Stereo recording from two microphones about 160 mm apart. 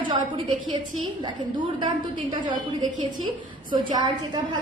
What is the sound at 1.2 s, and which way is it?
A woman's voice, 30° right (ahead or behind).